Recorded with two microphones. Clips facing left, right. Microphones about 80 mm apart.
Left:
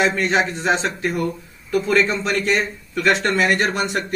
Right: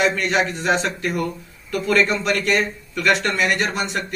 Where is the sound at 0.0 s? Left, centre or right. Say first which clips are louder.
Left 1 dB; left.